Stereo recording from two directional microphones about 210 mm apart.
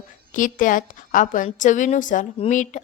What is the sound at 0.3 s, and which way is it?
A woman's voice, 40° left (ahead or behind).